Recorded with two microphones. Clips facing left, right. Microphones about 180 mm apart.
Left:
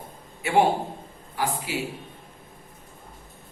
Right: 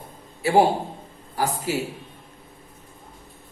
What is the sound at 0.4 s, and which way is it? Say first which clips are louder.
A man's voice: right 3 dB; 35° right (ahead or behind).